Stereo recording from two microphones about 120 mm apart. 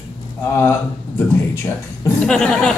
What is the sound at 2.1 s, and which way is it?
Speech, 5° left (ahead or behind).